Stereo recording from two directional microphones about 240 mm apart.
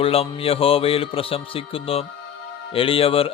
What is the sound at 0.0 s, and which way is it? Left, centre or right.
Music, left.